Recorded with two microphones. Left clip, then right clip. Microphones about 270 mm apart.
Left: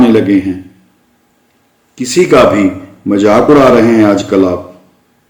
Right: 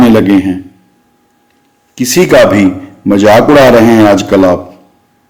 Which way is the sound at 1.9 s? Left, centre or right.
Right.